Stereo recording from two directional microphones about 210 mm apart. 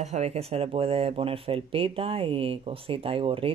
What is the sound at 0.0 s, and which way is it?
Speech, 30° right (ahead or behind).